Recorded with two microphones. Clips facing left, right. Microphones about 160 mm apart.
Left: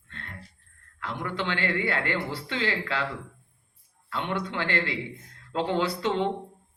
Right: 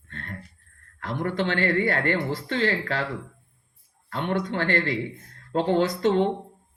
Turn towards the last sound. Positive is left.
turn(degrees=-45)  # may be behind; listen again after turning